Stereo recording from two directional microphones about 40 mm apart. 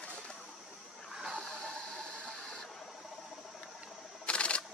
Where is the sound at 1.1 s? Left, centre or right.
Centre.